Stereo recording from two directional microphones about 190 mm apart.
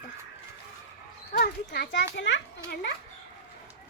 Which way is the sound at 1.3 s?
55° left (ahead or behind).